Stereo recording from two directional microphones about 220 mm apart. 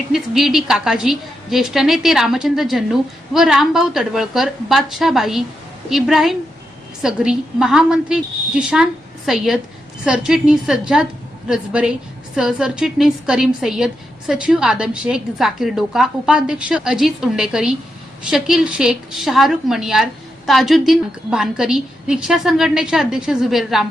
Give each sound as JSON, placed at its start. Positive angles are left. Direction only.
{"t": 0.1, "sound": "a woman's voice", "side_deg": 0}